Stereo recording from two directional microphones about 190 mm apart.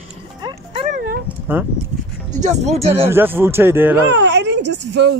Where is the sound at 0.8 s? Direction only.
50° right (ahead or behind).